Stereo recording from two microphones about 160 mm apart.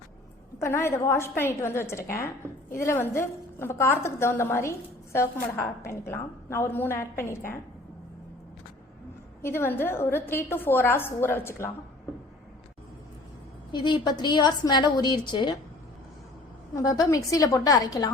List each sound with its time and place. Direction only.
0.6 s a woman's voice: 15° left (ahead or behind)
9.4 s a woman's voice: 15° left (ahead or behind)
13.7 s a woman's voice: 30° left (ahead or behind)
16.7 s a woman's voice: 20° left (ahead or behind)